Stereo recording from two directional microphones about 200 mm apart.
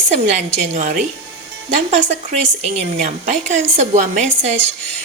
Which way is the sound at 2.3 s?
35° right (ahead or behind).